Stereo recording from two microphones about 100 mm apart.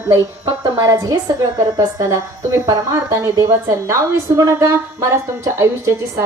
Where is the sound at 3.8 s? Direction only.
30° right (ahead or behind).